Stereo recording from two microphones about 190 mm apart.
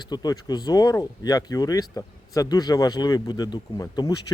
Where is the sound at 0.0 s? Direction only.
20° left (ahead or behind).